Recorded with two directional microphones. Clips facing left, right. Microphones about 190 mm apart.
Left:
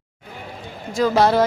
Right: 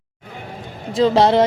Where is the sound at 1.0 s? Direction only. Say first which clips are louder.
Right 3 dB; 25° right (ahead or behind).